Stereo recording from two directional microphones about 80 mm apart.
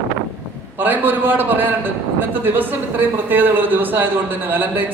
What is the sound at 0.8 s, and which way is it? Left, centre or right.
A man's voice, right.